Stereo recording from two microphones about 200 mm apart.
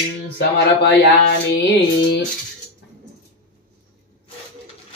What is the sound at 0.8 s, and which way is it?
Speech, 55° left (ahead or behind).